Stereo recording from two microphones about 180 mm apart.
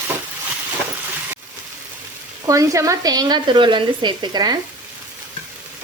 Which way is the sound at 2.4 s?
20° right (ahead or behind).